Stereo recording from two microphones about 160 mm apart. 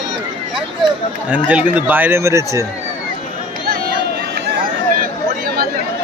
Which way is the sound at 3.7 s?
75° right (ahead or behind).